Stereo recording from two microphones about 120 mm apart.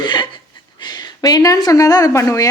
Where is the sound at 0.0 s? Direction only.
40° left (ahead or behind).